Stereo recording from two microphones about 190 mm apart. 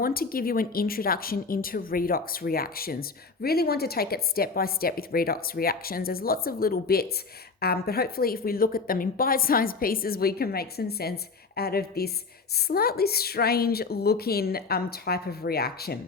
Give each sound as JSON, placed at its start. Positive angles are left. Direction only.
{"t": 0.0, "sound": "a woman's voice", "side_deg": 50}